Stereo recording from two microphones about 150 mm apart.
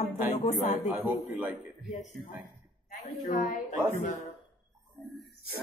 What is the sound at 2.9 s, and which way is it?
Speech, 70° left (ahead or behind).